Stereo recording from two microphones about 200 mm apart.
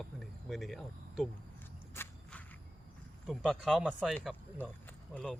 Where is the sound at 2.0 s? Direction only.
10° left (ahead or behind).